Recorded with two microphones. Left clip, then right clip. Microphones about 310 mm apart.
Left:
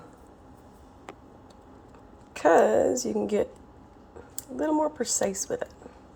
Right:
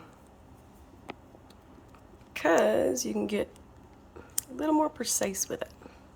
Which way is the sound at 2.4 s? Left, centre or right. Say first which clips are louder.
Left 4 dB; centre.